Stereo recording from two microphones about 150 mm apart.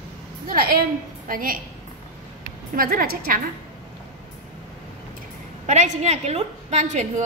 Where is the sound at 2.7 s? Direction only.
70° right (ahead or behind).